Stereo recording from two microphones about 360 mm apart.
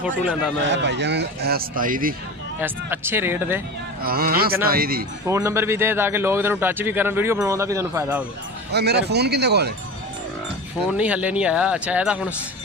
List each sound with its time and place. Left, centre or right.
0.0 s speech: centre
0.6 s speech: right
2.6 s speech: centre
4.0 s speech: right
5.2 s a man's voice: centre
8.7 s speech: right
10.9 s speech: centre